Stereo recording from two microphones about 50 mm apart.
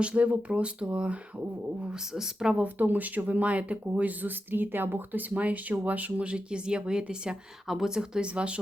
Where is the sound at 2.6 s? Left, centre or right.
Right.